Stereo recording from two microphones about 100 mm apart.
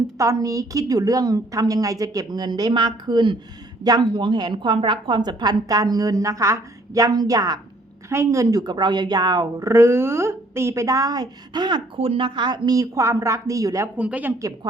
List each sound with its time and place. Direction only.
0.2 s a woman's voice: 35° right (ahead or behind)
11.9 s speech: 65° right (ahead or behind); by 13.9 s 35° right (ahead or behind)
13.9 s a woman's voice: 15° right (ahead or behind)